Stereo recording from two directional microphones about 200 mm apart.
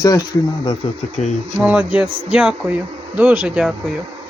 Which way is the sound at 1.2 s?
35° left (ahead or behind).